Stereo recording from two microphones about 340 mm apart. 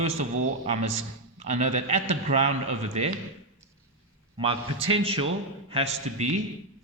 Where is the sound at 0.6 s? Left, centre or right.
Centre.